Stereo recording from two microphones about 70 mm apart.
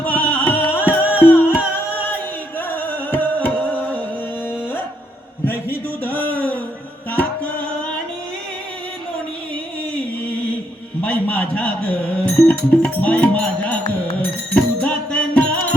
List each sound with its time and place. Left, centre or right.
0.0 s music: left
5.5 s a sound: left
7.1 s music: left
11.0 s music: left